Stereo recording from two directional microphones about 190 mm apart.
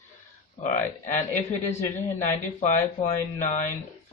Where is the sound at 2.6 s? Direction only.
40° left (ahead or behind).